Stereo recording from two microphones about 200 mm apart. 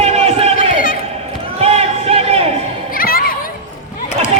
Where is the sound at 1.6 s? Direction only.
30° right (ahead or behind).